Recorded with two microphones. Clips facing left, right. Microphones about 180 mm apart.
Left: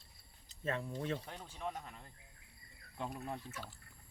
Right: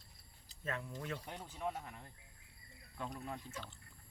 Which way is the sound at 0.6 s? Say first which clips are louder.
Left 4 dB; 30° left (ahead or behind).